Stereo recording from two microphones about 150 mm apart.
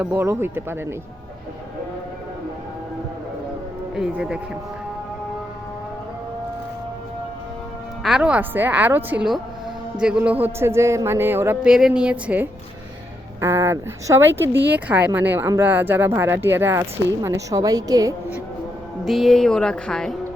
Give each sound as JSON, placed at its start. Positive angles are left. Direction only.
{"t": 0.0, "sound": "speech", "side_deg": -15}
{"t": 3.9, "sound": "speech", "side_deg": -5}
{"t": 8.0, "sound": "speech", "side_deg": -5}
{"t": 19.0, "sound": "speech", "side_deg": 0}